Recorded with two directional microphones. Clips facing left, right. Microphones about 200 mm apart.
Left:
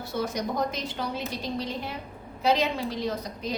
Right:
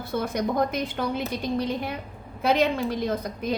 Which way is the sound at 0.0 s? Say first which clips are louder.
Right 3 dB; 55° right (ahead or behind).